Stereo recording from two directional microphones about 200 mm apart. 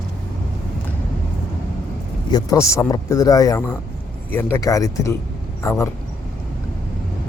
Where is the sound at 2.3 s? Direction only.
15° left (ahead or behind).